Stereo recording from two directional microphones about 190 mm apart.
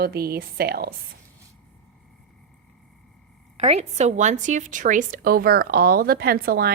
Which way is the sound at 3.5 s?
35° right (ahead or behind).